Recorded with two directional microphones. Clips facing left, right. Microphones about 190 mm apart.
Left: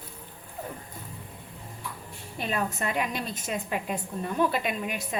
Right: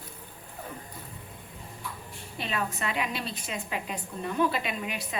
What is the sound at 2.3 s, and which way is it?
A woman's voice, 50° left (ahead or behind).